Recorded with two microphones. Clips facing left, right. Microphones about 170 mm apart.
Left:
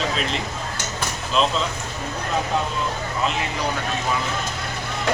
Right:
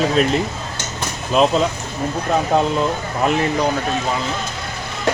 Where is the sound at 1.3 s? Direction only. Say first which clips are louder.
Right 7 dB; 50° right (ahead or behind).